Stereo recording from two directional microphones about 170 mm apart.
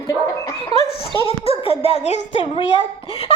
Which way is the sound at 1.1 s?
35° left (ahead or behind).